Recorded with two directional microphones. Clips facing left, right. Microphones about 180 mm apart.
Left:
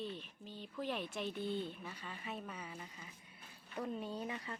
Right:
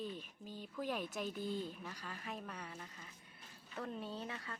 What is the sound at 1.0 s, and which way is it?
Speech, 45° right (ahead or behind).